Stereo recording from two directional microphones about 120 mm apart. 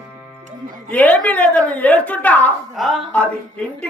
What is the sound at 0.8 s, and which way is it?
A woman's voice, 15° left (ahead or behind).